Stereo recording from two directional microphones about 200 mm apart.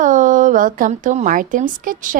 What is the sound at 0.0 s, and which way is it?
A woman's voice, 40° right (ahead or behind).